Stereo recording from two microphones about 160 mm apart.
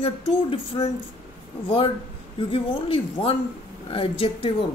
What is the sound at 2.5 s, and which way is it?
Speech, 35° left (ahead or behind).